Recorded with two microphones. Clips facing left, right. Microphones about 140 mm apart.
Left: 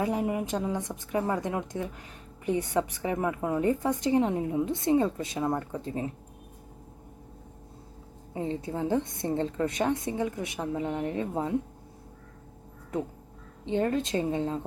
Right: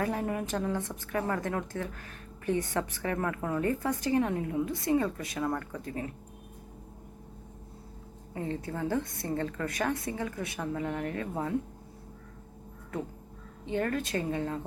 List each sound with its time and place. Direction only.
0.0 s a woman's voice: 15° left (ahead or behind)
8.3 s a woman's voice: 20° left (ahead or behind)
13.7 s a woman's voice: 20° left (ahead or behind)